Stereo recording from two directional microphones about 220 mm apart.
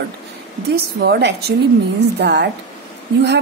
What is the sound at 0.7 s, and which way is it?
A woman's voice, 45° right (ahead or behind).